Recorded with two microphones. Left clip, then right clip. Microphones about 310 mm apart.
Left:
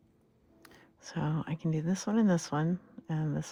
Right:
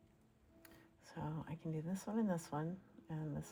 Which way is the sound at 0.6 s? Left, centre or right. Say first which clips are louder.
Left 11 dB; left.